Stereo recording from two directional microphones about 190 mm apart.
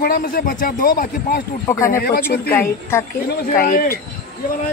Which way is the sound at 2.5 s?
10° left (ahead or behind).